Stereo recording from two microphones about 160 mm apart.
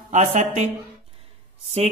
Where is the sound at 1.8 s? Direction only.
40° right (ahead or behind).